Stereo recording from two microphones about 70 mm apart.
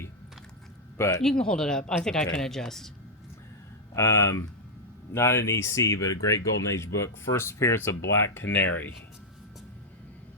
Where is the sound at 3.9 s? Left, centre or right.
Left.